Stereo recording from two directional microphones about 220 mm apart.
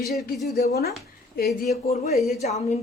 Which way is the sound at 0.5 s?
45° left (ahead or behind).